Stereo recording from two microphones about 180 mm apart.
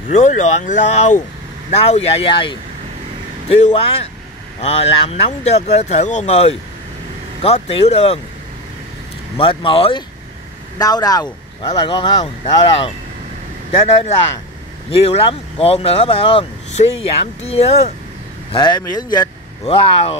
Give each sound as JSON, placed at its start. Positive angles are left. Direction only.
{"t": 0.1, "sound": "speech", "side_deg": 45}
{"t": 9.4, "sound": "speech", "side_deg": 30}
{"t": 13.7, "sound": "speech", "side_deg": 30}
{"t": 18.5, "sound": "speech", "side_deg": 25}
{"t": 19.6, "sound": "speech", "side_deg": 30}